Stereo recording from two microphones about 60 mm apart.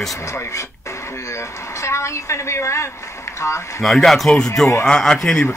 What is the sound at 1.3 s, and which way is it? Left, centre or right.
A woman's voice, left.